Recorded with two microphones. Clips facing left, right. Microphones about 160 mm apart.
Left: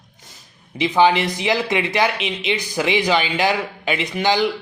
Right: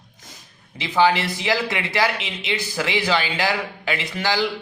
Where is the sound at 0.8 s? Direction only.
20° left (ahead or behind).